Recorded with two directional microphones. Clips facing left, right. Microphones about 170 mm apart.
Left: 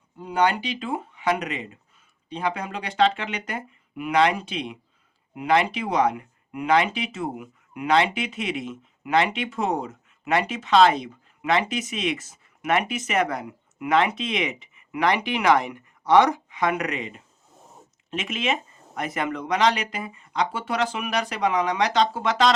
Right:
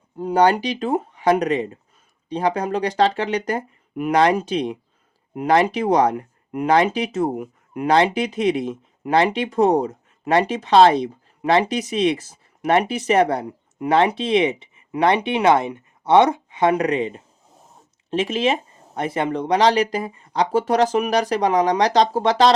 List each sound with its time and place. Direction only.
0.2 s speech: 40° right (ahead or behind)